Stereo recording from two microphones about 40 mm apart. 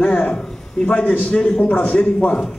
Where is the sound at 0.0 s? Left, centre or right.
Left.